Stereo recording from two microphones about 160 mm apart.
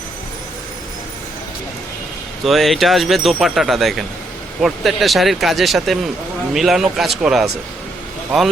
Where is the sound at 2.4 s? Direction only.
Centre (ahead or behind).